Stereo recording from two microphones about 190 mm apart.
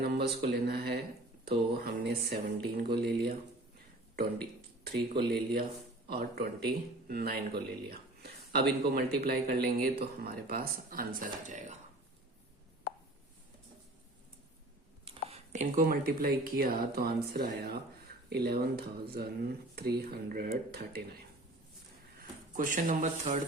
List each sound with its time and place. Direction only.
0.0 s speech: 60° right (ahead or behind)
4.8 s speech: 55° right (ahead or behind)
15.0 s speech: 30° right (ahead or behind); by 21.2 s 55° right (ahead or behind)
22.5 s speech: 45° right (ahead or behind)